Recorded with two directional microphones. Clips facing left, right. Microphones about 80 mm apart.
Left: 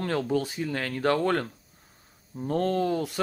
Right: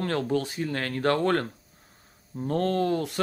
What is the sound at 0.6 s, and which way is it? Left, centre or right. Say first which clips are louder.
Speech: even; centre.